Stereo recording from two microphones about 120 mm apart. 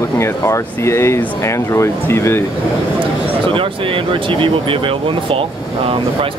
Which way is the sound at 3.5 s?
50° right (ahead or behind).